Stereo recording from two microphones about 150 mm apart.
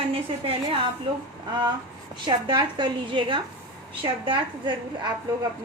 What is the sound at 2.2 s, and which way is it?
A woman's voice, 30° right (ahead or behind).